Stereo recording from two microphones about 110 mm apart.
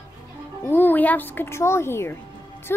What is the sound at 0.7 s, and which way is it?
A woman's voice, 15° left (ahead or behind).